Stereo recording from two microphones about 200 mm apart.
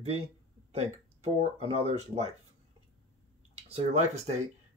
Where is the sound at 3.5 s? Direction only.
30° right (ahead or behind).